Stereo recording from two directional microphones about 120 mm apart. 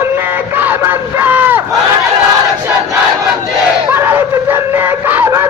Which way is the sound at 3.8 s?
20° right (ahead or behind).